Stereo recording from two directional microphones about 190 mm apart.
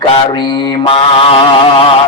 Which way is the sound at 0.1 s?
25° left (ahead or behind).